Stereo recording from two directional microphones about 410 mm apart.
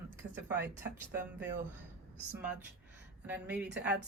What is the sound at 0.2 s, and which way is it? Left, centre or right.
Speech, centre.